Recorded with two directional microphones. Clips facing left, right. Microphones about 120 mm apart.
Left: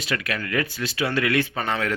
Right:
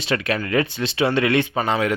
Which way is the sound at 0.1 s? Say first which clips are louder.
Right 6 dB; 25° right (ahead or behind).